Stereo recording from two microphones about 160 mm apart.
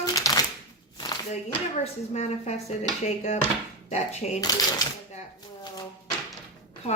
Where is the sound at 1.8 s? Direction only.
45° left (ahead or behind).